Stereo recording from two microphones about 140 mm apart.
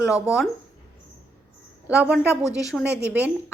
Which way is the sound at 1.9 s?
5° right (ahead or behind).